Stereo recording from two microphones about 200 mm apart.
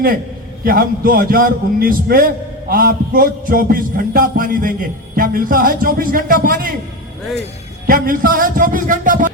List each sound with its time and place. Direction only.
0.6 s a man's voice: 45° right (ahead or behind)
7.9 s a man's voice: 45° right (ahead or behind)